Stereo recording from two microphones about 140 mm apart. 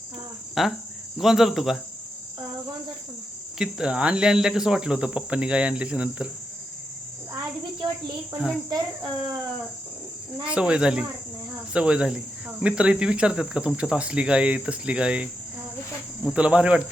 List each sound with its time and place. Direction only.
0.6 s speech: centre (ahead or behind)
3.6 s cricket: 5° right (ahead or behind)
7.8 s speech: 30° right (ahead or behind)
10.4 s cricket: 5° right (ahead or behind)